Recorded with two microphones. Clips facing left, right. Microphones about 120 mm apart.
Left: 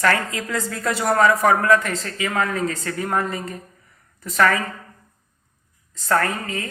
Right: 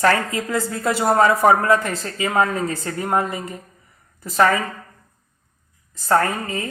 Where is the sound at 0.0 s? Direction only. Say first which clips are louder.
Right 2 dB; 25° right (ahead or behind).